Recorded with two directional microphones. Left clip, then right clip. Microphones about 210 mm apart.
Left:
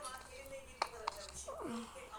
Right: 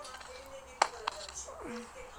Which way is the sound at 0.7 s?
45° right (ahead or behind).